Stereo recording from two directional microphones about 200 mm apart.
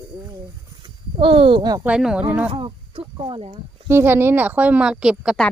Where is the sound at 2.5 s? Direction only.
30° right (ahead or behind).